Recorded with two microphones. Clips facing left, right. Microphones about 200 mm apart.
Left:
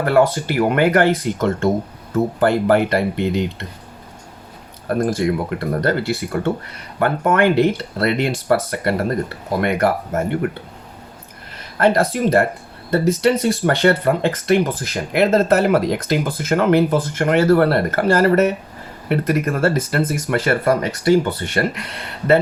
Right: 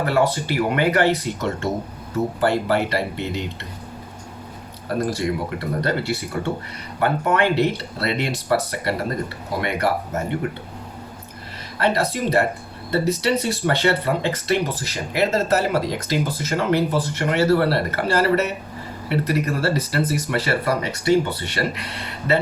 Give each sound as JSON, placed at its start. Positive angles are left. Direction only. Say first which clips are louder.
{"t": 0.0, "sound": "speech", "louder": "left 4 dB", "side_deg": 50}
{"t": 4.9, "sound": "speech", "louder": "left 4 dB", "side_deg": 50}
{"t": 11.8, "sound": "speech", "louder": "left 5 dB", "side_deg": 50}